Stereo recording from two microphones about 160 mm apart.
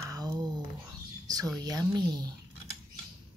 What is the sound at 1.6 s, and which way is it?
Speech, 25° right (ahead or behind).